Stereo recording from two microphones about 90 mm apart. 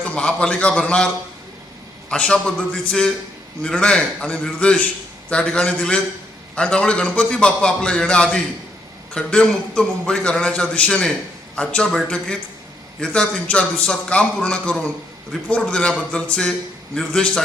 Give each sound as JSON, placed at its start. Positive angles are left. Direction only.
{"t": 0.0, "sound": "a man's voice", "side_deg": 15}
{"t": 13.0, "sound": "a man's voice", "side_deg": 10}